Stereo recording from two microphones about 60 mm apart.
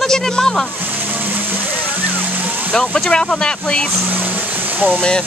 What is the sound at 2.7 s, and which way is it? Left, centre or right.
Speech, centre.